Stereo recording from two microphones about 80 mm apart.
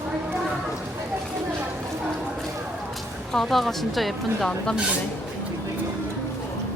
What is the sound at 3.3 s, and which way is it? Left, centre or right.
Speech, centre.